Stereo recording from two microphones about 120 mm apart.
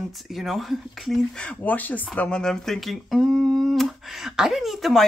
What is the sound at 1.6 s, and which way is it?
Speech, 15° left (ahead or behind).